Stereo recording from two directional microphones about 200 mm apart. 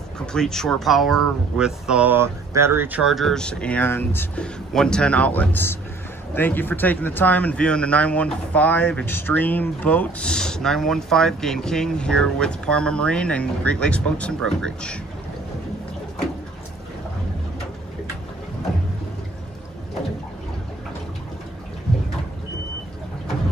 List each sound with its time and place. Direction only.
0.3 s speech: 5° left (ahead or behind)